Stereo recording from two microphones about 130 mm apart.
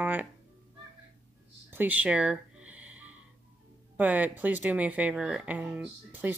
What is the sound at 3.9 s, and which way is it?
Speech, 15° right (ahead or behind).